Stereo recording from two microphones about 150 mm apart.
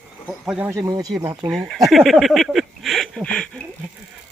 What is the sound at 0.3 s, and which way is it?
Speech, 5° right (ahead or behind).